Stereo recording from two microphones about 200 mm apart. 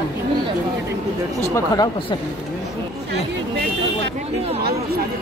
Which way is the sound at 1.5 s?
20° left (ahead or behind).